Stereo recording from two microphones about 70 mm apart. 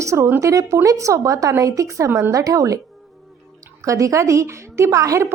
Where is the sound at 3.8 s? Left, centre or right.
Right.